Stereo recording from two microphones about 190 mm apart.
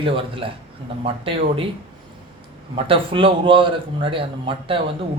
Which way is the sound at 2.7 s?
30° right (ahead or behind).